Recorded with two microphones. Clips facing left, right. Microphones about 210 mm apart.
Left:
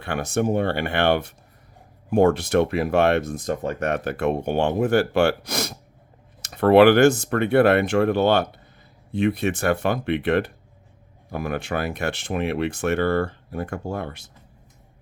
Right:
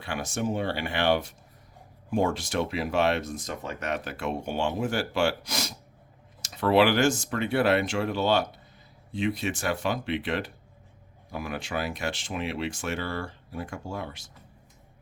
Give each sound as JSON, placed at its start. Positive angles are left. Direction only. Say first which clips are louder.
{"t": 0.0, "sound": "speech", "louder": "left 7 dB", "side_deg": 60}